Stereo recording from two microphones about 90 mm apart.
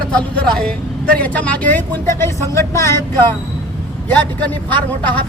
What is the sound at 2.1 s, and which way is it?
Speech, 30° left (ahead or behind).